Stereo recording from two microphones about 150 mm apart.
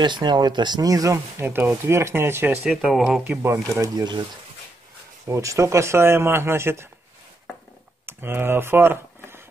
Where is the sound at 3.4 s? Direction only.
20° right (ahead or behind).